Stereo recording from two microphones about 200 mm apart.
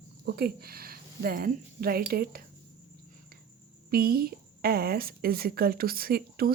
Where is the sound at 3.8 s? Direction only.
50° right (ahead or behind).